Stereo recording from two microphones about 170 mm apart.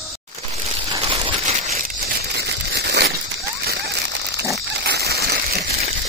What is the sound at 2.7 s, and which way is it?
Crumpling, 75° right (ahead or behind).